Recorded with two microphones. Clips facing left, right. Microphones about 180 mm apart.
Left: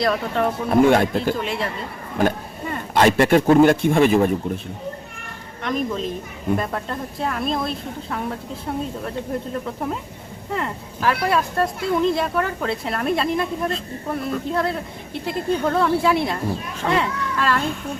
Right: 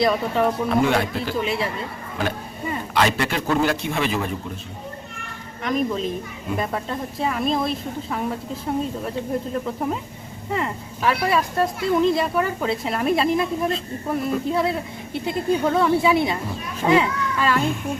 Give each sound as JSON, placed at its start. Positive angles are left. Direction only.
{"t": 0.0, "sound": "speech", "side_deg": 0}
{"t": 0.7, "sound": "a man's voice", "side_deg": 50}
{"t": 1.4, "sound": "speech", "side_deg": -5}
{"t": 2.9, "sound": "a man's voice", "side_deg": 50}
{"t": 5.6, "sound": "speech", "side_deg": 0}
{"t": 10.5, "sound": "speech", "side_deg": 0}